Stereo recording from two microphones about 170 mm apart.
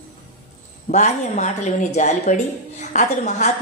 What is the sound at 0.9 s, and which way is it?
A woman's voice, 45° left (ahead or behind).